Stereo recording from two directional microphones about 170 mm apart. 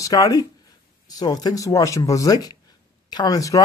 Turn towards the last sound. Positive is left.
turn(degrees=20)  # may be behind; listen again after turning